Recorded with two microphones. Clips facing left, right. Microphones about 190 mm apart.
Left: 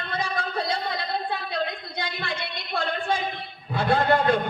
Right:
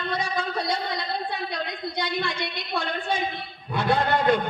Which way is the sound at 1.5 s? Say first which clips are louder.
Left 1 dB; 55° left (ahead or behind).